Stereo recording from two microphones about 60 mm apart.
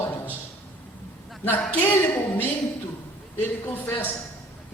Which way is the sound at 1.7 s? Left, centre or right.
Left.